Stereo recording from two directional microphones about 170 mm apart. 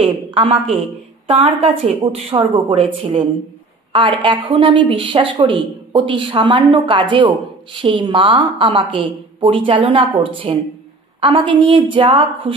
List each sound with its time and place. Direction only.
0.0 s a woman's voice: 30° right (ahead or behind)